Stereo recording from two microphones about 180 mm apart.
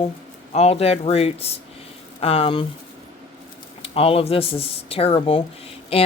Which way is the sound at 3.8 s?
30° left (ahead or behind).